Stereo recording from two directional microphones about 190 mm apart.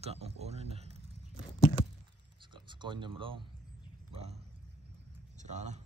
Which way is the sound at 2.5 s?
25° right (ahead or behind).